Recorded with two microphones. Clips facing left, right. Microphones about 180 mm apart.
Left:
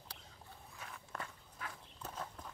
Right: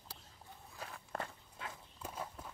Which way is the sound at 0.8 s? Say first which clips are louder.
Right 4 dB; 40° right (ahead or behind).